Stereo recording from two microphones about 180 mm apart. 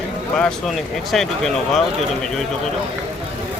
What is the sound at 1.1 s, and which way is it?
Speech, centre (ahead or behind).